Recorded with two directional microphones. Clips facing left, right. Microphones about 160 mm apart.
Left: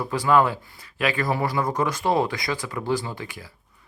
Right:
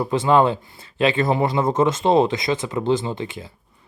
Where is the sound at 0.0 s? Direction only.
25° right (ahead or behind).